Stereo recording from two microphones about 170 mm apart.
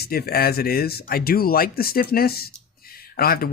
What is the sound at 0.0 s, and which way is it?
Speech, 65° left (ahead or behind).